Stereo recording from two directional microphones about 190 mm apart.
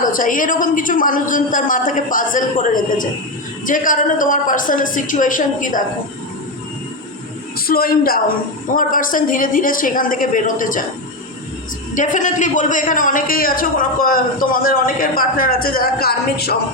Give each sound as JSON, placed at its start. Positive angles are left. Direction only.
{"t": 0.0, "sound": "a man's voice", "side_deg": 45}
{"t": 7.7, "sound": "a man's voice", "side_deg": 50}
{"t": 11.9, "sound": "a man's voice", "side_deg": 40}